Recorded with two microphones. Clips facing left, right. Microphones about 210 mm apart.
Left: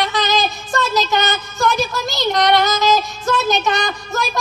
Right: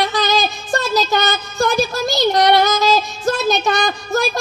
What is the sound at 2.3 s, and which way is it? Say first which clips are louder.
Child singing: right 1 dB; 30° right (ahead or behind).